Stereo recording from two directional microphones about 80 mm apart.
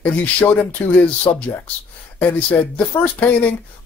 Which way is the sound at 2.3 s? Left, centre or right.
Centre.